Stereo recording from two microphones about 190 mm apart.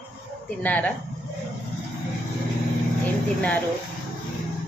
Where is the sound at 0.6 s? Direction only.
5° left (ahead or behind).